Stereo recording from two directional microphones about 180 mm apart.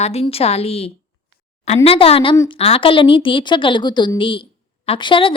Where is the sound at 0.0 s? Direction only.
35° left (ahead or behind).